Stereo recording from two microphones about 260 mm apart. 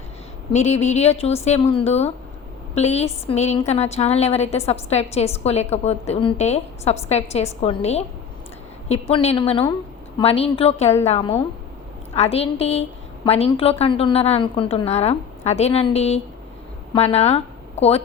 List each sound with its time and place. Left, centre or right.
0.5 s a woman's voice: left